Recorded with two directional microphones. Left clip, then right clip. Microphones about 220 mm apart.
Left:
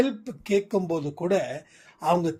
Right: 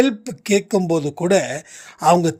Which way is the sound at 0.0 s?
45° right (ahead or behind).